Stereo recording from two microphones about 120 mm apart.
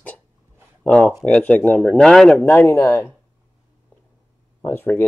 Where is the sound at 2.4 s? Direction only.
25° left (ahead or behind).